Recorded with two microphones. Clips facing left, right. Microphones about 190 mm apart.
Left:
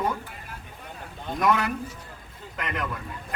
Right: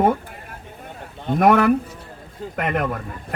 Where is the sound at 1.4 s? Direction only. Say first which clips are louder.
Right 9 dB; 55° right (ahead or behind).